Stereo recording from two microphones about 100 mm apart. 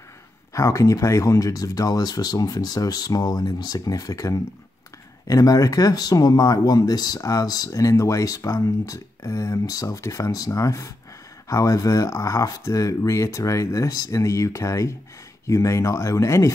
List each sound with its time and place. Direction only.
0.5 s speech: 30° left (ahead or behind)